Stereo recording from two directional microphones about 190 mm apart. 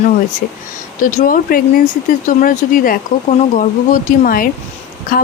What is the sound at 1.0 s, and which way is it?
Speech, 45° left (ahead or behind).